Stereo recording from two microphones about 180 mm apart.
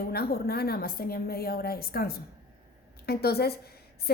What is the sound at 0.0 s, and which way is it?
A woman's voice, 55° left (ahead or behind).